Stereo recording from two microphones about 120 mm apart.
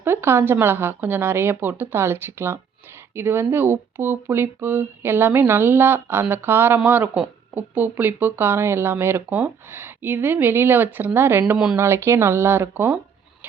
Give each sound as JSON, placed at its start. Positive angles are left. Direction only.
{"t": 0.0, "sound": "speech", "side_deg": -20}
{"t": 11.5, "sound": "speech", "side_deg": -5}
{"t": 11.8, "sound": "speech", "side_deg": -20}